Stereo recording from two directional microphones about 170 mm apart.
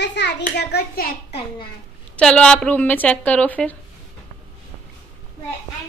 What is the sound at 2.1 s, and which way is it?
A woman's voice, 5° left (ahead or behind).